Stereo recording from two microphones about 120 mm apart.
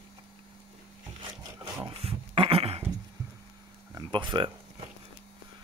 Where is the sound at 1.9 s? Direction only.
50° right (ahead or behind).